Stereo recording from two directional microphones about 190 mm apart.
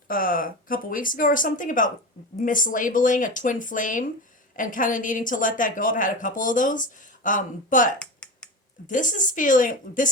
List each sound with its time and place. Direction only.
0.1 s a woman's voice: 50° left (ahead or behind)
7.9 s finger snapping: 5° left (ahead or behind)
8.9 s a woman's voice: 45° left (ahead or behind)